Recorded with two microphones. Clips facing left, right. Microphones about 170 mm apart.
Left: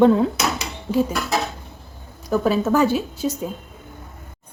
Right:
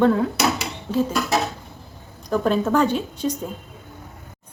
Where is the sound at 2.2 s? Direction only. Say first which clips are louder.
Left 1 dB; 5° left (ahead or behind).